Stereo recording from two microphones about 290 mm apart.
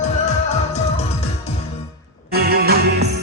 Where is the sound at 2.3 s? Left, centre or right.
Right.